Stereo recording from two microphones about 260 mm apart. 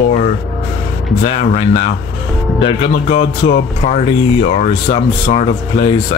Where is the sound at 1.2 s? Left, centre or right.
Left.